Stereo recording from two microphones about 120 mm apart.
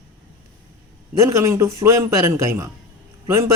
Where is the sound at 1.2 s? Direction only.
25° right (ahead or behind).